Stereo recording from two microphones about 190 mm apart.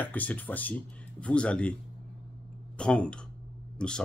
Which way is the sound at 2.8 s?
5° left (ahead or behind).